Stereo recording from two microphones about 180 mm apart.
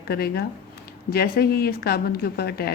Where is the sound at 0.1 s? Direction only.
60° left (ahead or behind).